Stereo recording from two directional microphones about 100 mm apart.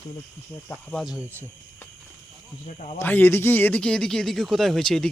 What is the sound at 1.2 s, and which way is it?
Speech, 25° right (ahead or behind).